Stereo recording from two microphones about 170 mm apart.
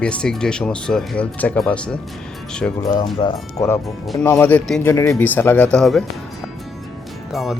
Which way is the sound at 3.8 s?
Centre (ahead or behind).